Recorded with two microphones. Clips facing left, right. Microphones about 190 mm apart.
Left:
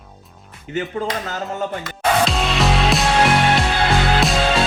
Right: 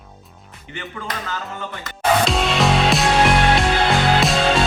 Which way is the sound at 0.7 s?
40° left (ahead or behind).